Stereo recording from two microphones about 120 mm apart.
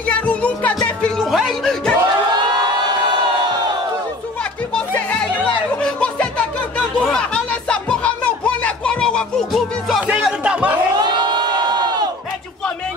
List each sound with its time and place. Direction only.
0.1 s music: 10° left (ahead or behind)
5.9 s music: 10° left (ahead or behind); by 10.2 s 5° right (ahead or behind)
10.4 s speech: 10° right (ahead or behind)
11.0 s crowd: 35° right (ahead or behind)